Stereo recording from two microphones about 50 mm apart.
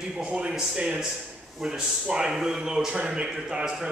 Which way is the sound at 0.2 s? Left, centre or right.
Right.